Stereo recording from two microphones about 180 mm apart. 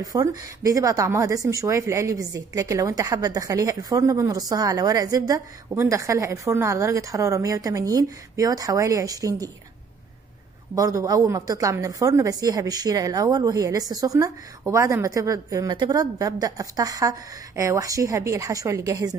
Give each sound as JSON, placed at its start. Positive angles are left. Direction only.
{"t": 0.0, "sound": "speech", "side_deg": -20}
{"t": 10.7, "sound": "a woman's voice", "side_deg": -20}